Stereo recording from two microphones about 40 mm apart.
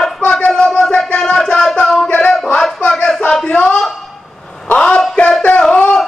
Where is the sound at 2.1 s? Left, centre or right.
Left.